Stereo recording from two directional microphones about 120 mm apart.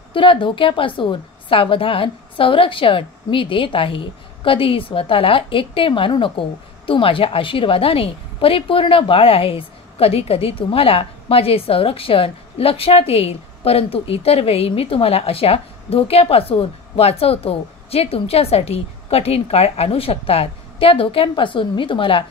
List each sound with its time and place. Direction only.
0.1 s a woman's voice: 45° left (ahead or behind)